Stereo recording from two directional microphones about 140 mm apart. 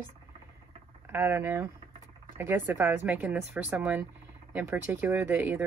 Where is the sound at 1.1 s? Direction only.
15° right (ahead or behind).